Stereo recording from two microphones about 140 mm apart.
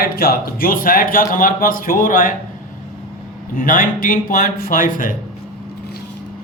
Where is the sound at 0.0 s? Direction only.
90° left; by 2.3 s 70° left (ahead or behind).